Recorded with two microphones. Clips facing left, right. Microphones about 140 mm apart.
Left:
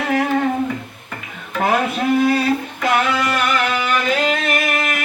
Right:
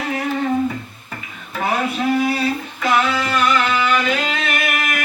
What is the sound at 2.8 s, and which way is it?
Music, 60° left (ahead or behind).